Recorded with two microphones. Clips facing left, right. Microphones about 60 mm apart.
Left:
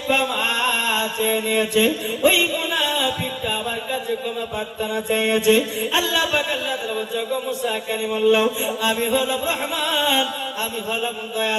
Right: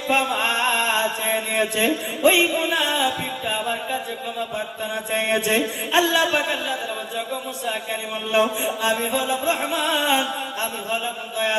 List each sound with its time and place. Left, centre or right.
0.1 s mantra: right
5.1 s music: right
8.3 s music: right